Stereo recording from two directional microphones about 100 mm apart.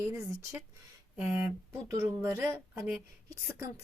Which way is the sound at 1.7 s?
30° right (ahead or behind).